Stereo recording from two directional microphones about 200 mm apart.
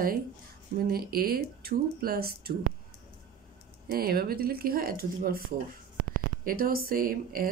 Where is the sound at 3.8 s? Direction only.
50° right (ahead or behind).